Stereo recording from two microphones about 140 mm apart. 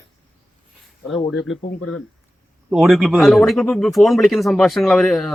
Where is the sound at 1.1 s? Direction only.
Centre (ahead or behind).